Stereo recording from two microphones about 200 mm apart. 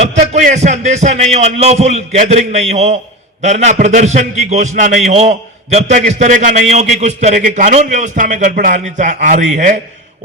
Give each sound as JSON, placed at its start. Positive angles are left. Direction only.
{"t": 0.0, "sound": "a man's voice", "side_deg": -35}